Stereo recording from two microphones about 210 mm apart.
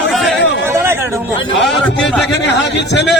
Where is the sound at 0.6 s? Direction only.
10° right (ahead or behind).